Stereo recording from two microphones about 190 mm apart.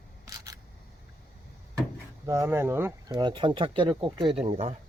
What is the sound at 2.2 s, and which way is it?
Speech, 15° right (ahead or behind).